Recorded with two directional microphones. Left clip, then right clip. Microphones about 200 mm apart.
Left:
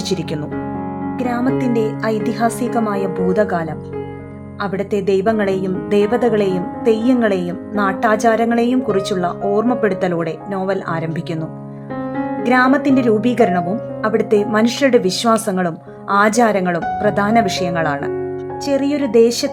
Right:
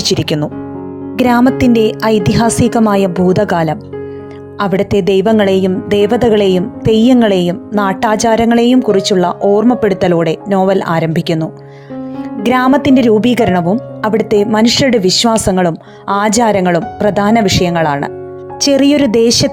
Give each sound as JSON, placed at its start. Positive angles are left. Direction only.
{"t": 0.0, "sound": "a woman's voice", "side_deg": -35}